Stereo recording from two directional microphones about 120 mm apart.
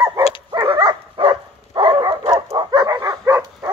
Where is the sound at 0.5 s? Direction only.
35° right (ahead or behind).